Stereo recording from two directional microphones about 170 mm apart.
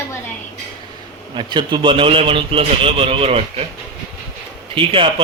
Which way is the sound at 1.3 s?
25° right (ahead or behind).